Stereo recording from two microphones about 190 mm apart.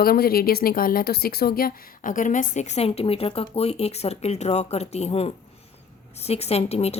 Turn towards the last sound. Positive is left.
turn(degrees=35)  # may be behind; listen again after turning